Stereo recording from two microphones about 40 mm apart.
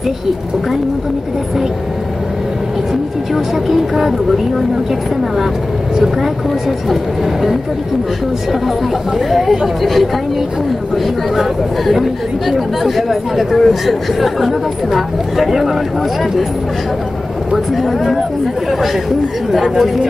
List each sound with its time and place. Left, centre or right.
3.3 s speech: centre
9.3 s speech: centre
11.3 s speech: centre